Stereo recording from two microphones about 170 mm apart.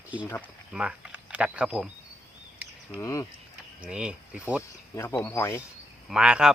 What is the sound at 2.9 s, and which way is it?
Speech, 15° left (ahead or behind).